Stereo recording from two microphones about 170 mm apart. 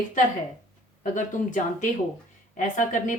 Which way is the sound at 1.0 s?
50° left (ahead or behind).